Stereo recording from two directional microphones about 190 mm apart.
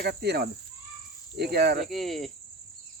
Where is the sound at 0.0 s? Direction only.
60° right (ahead or behind).